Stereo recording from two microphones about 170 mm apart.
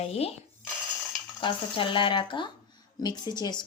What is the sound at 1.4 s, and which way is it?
A woman's voice, 30° left (ahead or behind).